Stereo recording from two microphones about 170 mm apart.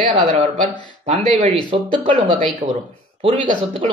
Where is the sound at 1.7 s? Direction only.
35° right (ahead or behind).